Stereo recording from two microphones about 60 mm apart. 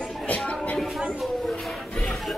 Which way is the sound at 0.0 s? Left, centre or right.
Centre.